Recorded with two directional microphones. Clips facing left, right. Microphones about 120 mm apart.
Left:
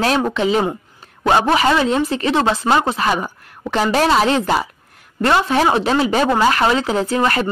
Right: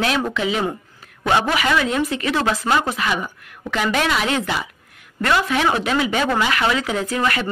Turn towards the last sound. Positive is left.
turn(degrees=30)  # may be behind; listen again after turning